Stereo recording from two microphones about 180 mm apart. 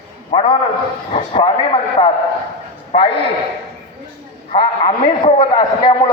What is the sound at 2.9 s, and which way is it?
Speech, 35° left (ahead or behind).